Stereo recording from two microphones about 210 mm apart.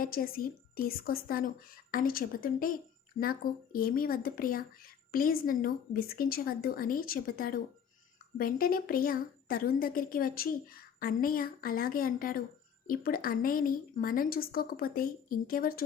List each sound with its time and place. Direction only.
0.0 s speech: 45° left (ahead or behind)